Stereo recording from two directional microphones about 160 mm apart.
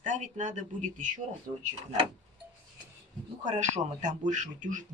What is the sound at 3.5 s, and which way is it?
Speech, 50° right (ahead or behind).